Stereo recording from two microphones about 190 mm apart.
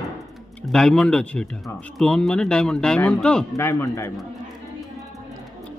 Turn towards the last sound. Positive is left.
turn(degrees=15)  # may be behind; listen again after turning